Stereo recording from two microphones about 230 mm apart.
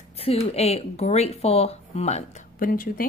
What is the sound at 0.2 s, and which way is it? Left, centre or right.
A woman's voice, left.